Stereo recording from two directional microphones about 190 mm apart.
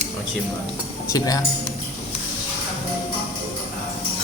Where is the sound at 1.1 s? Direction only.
20° left (ahead or behind).